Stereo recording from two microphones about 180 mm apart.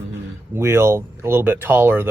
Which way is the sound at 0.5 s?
15° right (ahead or behind).